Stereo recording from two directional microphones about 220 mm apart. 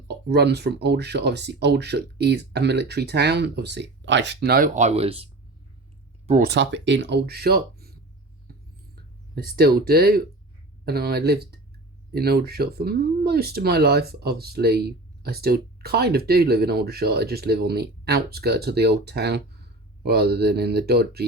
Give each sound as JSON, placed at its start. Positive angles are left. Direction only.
{"t": 0.3, "sound": "speech", "side_deg": -50}
{"t": 6.5, "sound": "speech", "side_deg": -55}
{"t": 9.3, "sound": "speech", "side_deg": -45}